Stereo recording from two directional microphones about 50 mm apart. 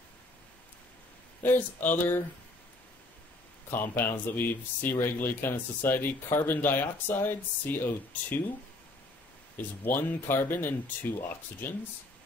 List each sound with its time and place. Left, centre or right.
1.4 s speech: left
3.7 s speech: left
9.6 s speech: left